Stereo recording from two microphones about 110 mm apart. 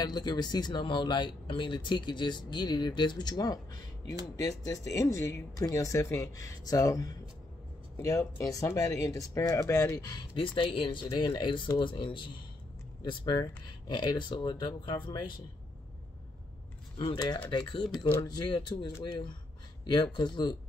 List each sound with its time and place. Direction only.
0.0 s speech: 40° left (ahead or behind)
10.3 s speech: 50° left (ahead or behind)
17.5 s speech: 45° left (ahead or behind)
19.9 s speech: 40° left (ahead or behind)